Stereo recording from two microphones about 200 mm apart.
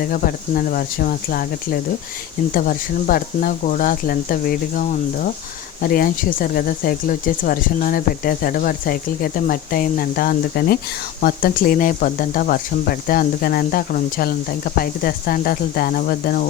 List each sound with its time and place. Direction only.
0.0 s speech: 45° left (ahead or behind)